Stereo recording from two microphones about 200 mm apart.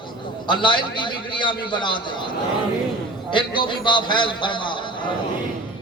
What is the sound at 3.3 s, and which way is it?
A man's voice, 25° left (ahead or behind).